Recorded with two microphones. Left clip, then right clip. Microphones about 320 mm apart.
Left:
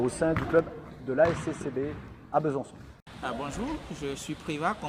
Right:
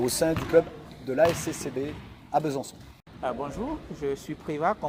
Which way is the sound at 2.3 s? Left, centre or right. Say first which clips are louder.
Right 1 dB; right.